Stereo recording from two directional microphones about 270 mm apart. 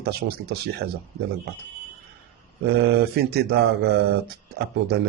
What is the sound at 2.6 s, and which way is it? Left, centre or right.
Speech, right.